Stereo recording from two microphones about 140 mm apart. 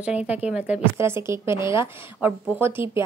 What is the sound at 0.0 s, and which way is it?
A woman's voice, 10° right (ahead or behind).